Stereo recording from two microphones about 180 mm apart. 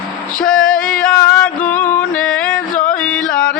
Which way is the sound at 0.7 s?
50° left (ahead or behind).